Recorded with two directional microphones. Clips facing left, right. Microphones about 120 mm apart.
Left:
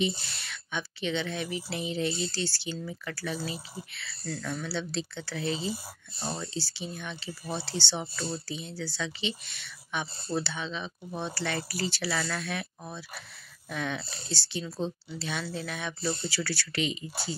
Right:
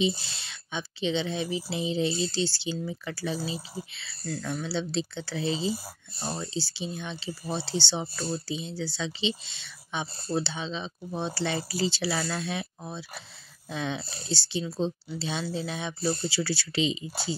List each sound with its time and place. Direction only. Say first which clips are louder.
0.4 s speech: even; 25° right (ahead or behind)
6.1 s speech: right 2 dB; 10° right (ahead or behind)
16.0 s speech: right 4 dB; 40° right (ahead or behind)
16.3 s speech: right 3 dB; 20° right (ahead or behind)